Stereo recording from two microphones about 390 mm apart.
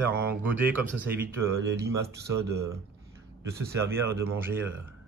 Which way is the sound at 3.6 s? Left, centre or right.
Centre.